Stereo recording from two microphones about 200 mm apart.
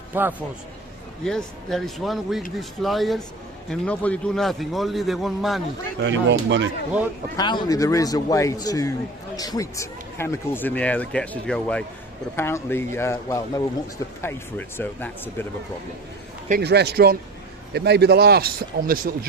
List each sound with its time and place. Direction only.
0.1 s a man's voice: 10° right (ahead or behind)
1.2 s a man's voice: centre (ahead or behind)
6.0 s speech: 65° right (ahead or behind)
7.3 s speech: 20° left (ahead or behind)
16.5 s a man's voice: 55° right (ahead or behind)